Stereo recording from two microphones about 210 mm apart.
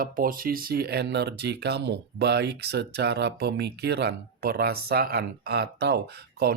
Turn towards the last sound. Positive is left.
turn(degrees=-50)  # may be behind; listen again after turning